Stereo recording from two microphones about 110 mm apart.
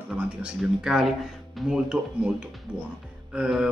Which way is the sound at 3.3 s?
5° right (ahead or behind).